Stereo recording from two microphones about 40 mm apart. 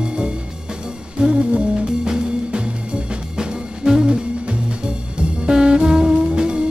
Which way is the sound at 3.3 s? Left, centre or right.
Centre.